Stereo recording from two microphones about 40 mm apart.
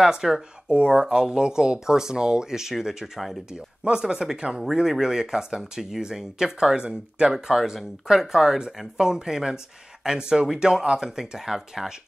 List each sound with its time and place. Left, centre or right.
0.0 s speech: centre
0.7 s speech: right
7.3 s speech: centre